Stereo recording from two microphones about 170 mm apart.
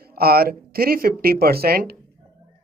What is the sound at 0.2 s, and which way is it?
Speech, 65° right (ahead or behind).